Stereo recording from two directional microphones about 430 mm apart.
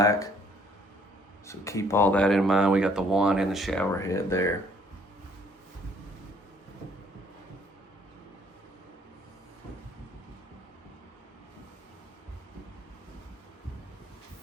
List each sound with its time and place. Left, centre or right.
0.0 s speech: centre
1.5 s speech: centre